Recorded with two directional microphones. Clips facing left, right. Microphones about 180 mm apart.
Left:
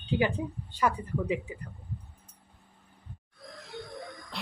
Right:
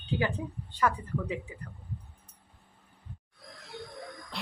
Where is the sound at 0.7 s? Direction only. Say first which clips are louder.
Left 1 dB; 10° left (ahead or behind).